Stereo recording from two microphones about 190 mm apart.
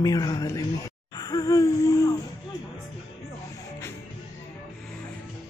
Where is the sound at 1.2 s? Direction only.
20° left (ahead or behind).